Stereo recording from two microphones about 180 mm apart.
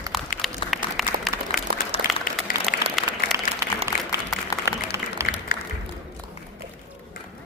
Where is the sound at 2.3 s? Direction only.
50° left (ahead or behind).